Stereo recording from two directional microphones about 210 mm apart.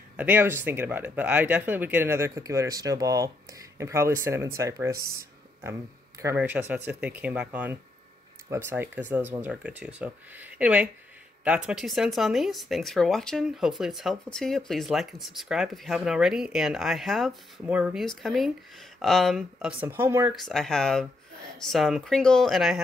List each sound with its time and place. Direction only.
0.2 s speech: 10° right (ahead or behind)
6.2 s speech: 10° right (ahead or behind)
20.3 s speech: centre (ahead or behind)